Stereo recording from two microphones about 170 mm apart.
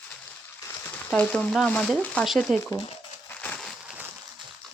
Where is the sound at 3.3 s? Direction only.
10° left (ahead or behind).